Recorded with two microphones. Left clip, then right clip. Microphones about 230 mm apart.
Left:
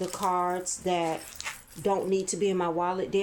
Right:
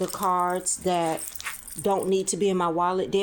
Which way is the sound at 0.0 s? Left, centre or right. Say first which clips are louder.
Right 3 dB; right.